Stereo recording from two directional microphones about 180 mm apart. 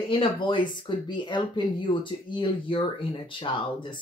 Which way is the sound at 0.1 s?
30° left (ahead or behind).